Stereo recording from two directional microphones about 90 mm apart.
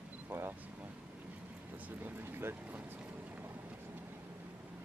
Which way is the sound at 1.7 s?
20° right (ahead or behind).